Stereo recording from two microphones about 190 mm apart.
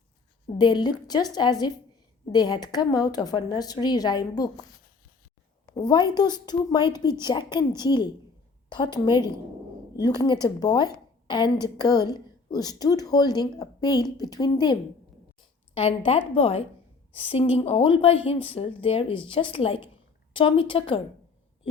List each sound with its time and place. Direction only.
0.6 s a woman's voice: 20° left (ahead or behind)
5.7 s a woman's voice: 20° left (ahead or behind)